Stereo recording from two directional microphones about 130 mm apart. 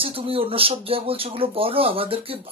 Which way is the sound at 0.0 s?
45° right (ahead or behind).